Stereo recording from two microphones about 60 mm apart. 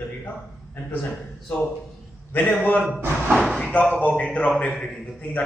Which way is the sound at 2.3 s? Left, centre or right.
Left.